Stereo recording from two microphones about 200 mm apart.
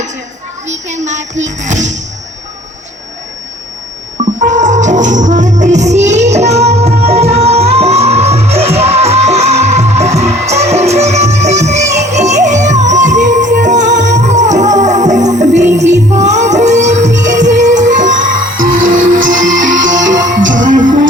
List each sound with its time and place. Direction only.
0.7 s speech: 35° right (ahead or behind)
4.4 s music: 40° right (ahead or behind)
18.3 s music: 75° right (ahead or behind)
20.6 s music: 40° right (ahead or behind)